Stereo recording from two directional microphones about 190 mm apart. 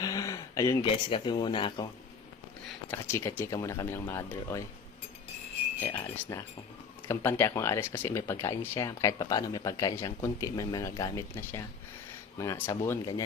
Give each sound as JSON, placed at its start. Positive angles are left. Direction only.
{"t": 0.0, "sound": "a sound", "side_deg": 15}
{"t": 0.9, "sound": "speech", "side_deg": 25}
{"t": 2.9, "sound": "speech", "side_deg": 15}
{"t": 5.8, "sound": "speech", "side_deg": 10}